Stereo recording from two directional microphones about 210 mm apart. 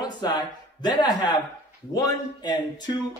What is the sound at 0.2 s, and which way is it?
Speech, 20° left (ahead or behind).